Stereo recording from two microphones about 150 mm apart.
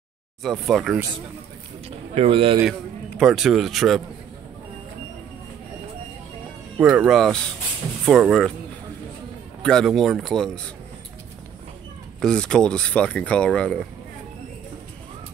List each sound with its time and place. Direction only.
0.4 s a man's voice: centre (ahead or behind)
1.9 s speech: 40° right (ahead or behind)
3.2 s a man's voice: centre (ahead or behind)
6.8 s a man's voice: 5° right (ahead or behind)
9.6 s a man's voice: 5° left (ahead or behind)
12.2 s speech: 5° left (ahead or behind)